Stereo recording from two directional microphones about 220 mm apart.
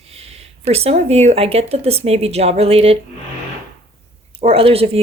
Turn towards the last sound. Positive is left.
turn(degrees=-25)  # may be behind; listen again after turning